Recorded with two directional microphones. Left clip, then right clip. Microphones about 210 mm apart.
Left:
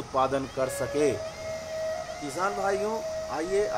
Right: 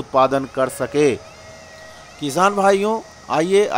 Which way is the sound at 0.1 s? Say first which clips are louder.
Right 10 dB; 30° right (ahead or behind).